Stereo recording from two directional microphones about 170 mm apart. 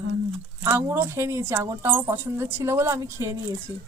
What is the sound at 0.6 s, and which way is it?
A woman's voice, 15° right (ahead or behind).